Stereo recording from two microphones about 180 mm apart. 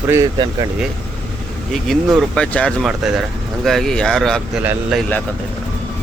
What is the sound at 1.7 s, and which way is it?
Speech, centre (ahead or behind).